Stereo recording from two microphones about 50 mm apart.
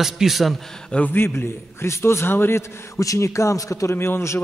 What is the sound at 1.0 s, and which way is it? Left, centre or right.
A man's voice, left.